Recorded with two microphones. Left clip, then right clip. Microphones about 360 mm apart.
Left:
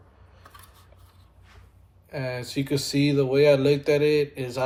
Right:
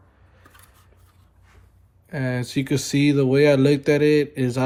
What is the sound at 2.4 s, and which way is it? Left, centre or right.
Speech, right.